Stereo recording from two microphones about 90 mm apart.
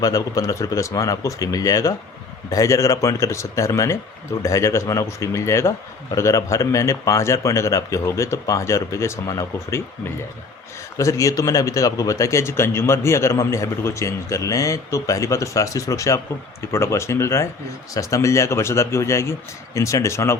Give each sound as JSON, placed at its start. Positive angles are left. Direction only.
{"t": 0.0, "sound": "speech", "side_deg": 40}